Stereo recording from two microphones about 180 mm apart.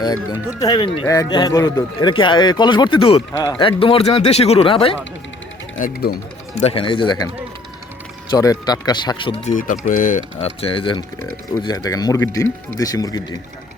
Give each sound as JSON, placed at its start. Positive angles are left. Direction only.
{"t": 0.0, "sound": "speech", "side_deg": 20}
{"t": 1.0, "sound": "speech", "side_deg": 15}
{"t": 5.8, "sound": "speech", "side_deg": 55}
{"t": 6.6, "sound": "speech", "side_deg": 30}
{"t": 8.3, "sound": "speech", "side_deg": 20}
{"t": 9.5, "sound": "speech", "side_deg": 45}
{"t": 11.2, "sound": "speech", "side_deg": 20}